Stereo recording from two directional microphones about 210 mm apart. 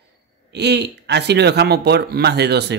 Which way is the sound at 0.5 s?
55° right (ahead or behind).